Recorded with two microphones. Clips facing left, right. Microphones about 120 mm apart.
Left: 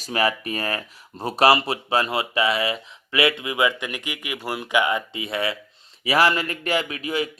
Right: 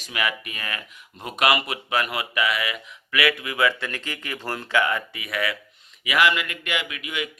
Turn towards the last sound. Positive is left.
turn(degrees=35)  # may be behind; listen again after turning